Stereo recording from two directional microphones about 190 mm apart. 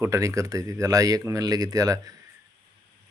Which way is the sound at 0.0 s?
15° right (ahead or behind).